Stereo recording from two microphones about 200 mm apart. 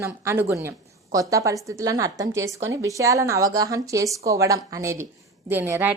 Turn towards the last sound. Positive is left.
turn(degrees=-10)  # may be behind; listen again after turning